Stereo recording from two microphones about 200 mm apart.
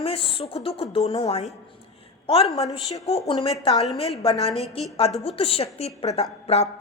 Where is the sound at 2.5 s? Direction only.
30° left (ahead or behind).